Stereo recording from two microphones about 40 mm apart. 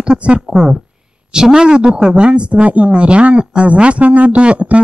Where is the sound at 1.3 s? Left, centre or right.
Centre; by 4.8 s right.